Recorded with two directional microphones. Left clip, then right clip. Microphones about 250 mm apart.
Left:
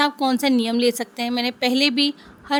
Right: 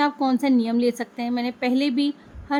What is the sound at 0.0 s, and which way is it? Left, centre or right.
Speech, left.